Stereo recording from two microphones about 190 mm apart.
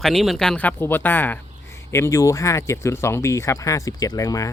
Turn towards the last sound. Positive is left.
turn(degrees=15)  # may be behind; listen again after turning